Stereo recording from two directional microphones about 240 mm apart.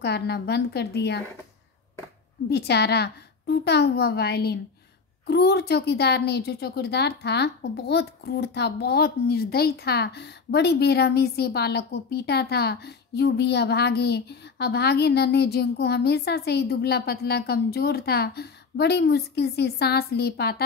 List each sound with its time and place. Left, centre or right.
0.0 s a woman's voice: left
2.5 s a woman's voice: left